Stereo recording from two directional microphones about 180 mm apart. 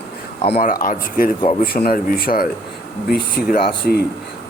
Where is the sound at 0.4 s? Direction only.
40° left (ahead or behind).